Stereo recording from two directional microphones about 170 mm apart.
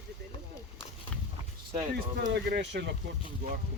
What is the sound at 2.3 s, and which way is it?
Speech, 90° right.